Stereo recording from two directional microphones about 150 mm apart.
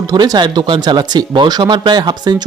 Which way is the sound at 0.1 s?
25° right (ahead or behind).